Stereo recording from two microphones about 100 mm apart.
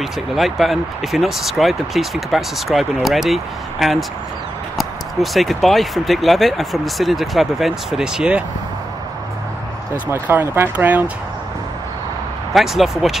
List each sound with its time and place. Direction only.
0.0 s speech: centre (ahead or behind)
10.1 s speech: 20° right (ahead or behind)
12.5 s speech: centre (ahead or behind)